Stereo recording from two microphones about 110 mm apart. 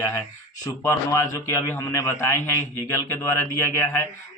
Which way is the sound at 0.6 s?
25° left (ahead or behind).